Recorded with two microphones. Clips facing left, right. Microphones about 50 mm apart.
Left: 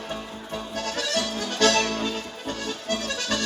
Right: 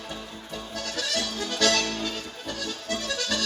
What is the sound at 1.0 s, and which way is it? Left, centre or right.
Accordion, left.